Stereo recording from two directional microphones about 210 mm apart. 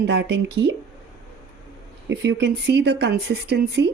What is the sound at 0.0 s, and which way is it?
Speech, 50° right (ahead or behind).